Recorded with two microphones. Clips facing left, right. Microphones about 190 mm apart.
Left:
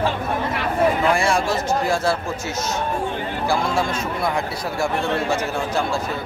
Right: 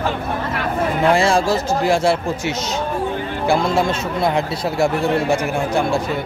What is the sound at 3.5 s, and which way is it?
Speech, 25° right (ahead or behind).